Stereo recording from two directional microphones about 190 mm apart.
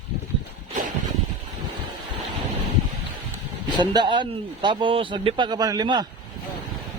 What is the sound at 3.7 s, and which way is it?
A man's voice, 25° right (ahead or behind).